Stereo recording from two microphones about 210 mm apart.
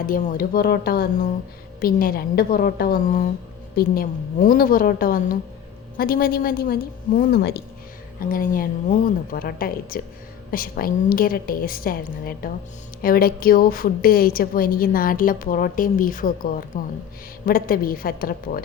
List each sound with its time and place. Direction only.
0.0 s a woman's voice: 40° left (ahead or behind)